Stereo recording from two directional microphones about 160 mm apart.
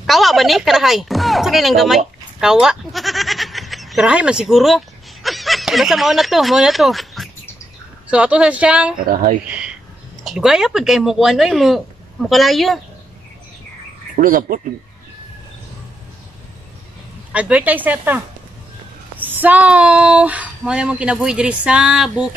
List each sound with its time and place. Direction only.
0.0 s speech: centre (ahead or behind)
9.0 s speech: 60° right (ahead or behind)
9.5 s a sound: 5° right (ahead or behind)
10.2 s speech: 5° right (ahead or behind)
14.1 s speech: 60° right (ahead or behind)
17.3 s speech: 10° right (ahead or behind)